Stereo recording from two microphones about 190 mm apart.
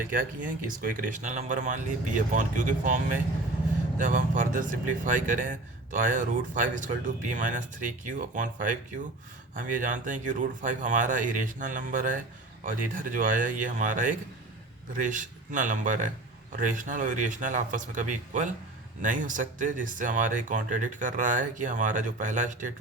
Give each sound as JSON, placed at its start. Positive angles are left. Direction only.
{"t": 0.1, "sound": "speech", "side_deg": -45}